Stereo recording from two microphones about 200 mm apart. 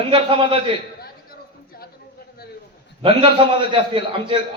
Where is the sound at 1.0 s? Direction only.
50° left (ahead or behind).